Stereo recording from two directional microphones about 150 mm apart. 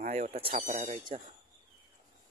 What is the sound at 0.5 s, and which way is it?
Speech, 65° right (ahead or behind).